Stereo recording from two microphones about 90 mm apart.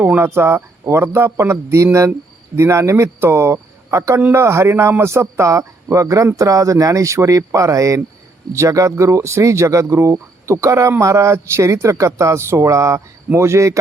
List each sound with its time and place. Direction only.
0.2 s speech: 25° right (ahead or behind)